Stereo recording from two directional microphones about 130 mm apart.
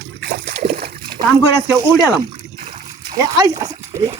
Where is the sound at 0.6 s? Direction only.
40° right (ahead or behind).